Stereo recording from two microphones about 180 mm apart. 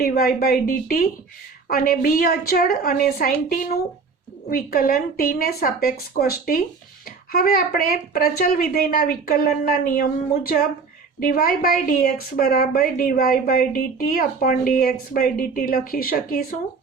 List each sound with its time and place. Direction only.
0.0 s a woman's voice: 55° left (ahead or behind)